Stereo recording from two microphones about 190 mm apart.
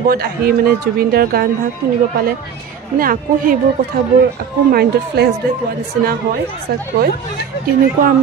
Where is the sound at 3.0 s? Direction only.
50° right (ahead or behind).